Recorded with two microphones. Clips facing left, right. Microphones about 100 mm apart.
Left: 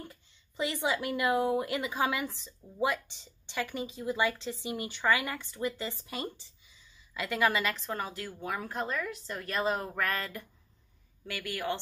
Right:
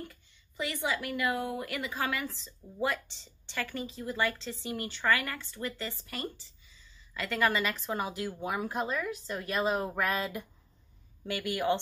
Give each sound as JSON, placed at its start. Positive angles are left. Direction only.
{"t": 0.1, "sound": "a woman's voice", "side_deg": 25}
{"t": 7.2, "sound": "a woman's voice", "side_deg": 5}